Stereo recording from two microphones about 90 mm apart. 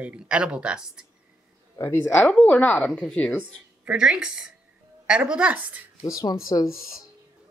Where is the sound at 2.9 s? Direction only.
5° left (ahead or behind).